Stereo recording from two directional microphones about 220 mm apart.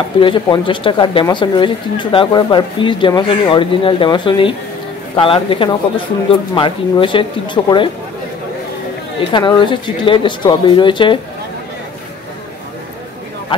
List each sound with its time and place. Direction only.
0.2 s speech: 20° left (ahead or behind)
9.3 s speech: 20° left (ahead or behind)